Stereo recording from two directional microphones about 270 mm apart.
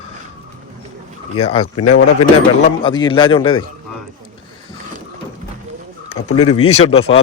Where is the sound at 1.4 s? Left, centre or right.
Left.